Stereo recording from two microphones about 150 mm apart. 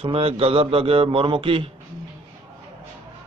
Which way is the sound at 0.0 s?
40° right (ahead or behind).